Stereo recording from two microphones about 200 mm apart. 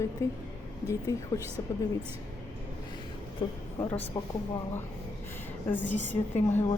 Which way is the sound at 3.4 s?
25° left (ahead or behind).